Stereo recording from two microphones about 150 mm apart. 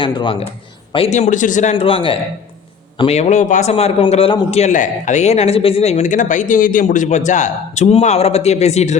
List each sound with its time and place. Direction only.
0.0 s a man's voice: 30° left (ahead or behind); by 1.7 s 55° left (ahead or behind)
1.7 s a man's voice: 40° left (ahead or behind)
4.5 s speech: 50° left (ahead or behind)